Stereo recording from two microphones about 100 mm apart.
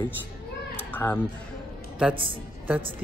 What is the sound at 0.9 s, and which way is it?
Speech, 20° left (ahead or behind).